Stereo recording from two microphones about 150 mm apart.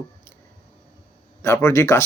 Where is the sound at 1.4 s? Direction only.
15° left (ahead or behind).